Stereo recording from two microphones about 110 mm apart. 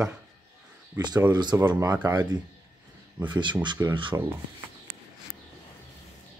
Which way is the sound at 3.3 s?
45° right (ahead or behind).